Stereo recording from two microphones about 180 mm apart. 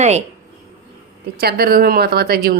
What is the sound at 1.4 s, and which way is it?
Speech, 60° right (ahead or behind).